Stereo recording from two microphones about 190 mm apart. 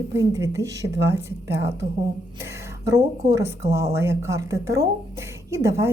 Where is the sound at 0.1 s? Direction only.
15° right (ahead or behind).